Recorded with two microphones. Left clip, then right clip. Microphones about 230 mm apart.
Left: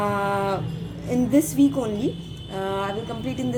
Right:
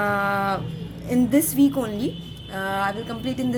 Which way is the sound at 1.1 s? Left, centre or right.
Right.